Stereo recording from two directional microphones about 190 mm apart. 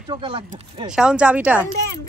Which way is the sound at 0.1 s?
25° right (ahead or behind).